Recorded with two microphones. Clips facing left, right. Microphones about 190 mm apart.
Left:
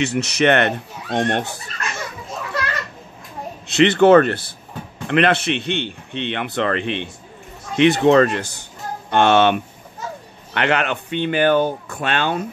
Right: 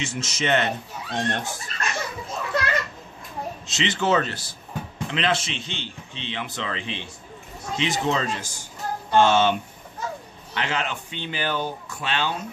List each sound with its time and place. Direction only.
0.0 s a man's voice: 65° left (ahead or behind)
3.6 s a man's voice: 60° left (ahead or behind)